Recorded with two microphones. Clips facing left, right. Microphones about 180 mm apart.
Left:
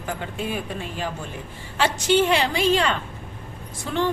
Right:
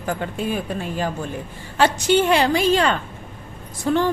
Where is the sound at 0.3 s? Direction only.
40° right (ahead or behind).